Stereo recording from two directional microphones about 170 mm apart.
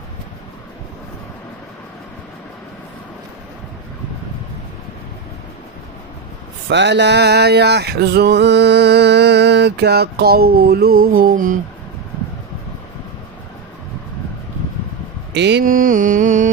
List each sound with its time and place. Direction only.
6.7 s a sound: 90° right; by 11.6 s 50° right (ahead or behind)
15.3 s mantra: 90° right
15.6 s music: 55° right (ahead or behind)